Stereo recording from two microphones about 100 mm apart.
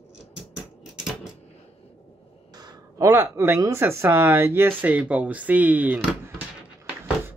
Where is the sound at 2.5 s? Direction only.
35° right (ahead or behind); by 6.4 s 15° right (ahead or behind).